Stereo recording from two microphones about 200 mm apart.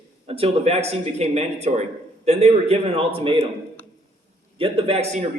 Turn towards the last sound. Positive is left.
turn(degrees=-35)  # may be behind; listen again after turning